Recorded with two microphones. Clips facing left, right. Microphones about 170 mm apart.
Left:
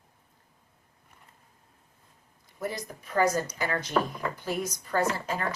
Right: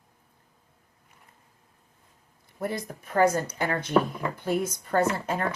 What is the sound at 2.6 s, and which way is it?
Speech, 55° right (ahead or behind).